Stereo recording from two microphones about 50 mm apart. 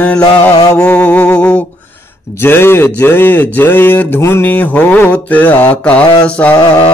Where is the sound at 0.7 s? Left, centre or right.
Left.